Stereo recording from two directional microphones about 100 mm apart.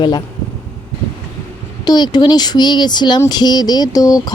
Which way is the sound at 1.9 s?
45° left (ahead or behind).